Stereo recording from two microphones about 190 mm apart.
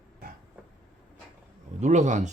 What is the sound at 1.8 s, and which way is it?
Speech, 40° right (ahead or behind).